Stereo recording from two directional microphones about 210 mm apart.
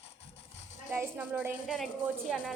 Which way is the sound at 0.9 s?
10° right (ahead or behind).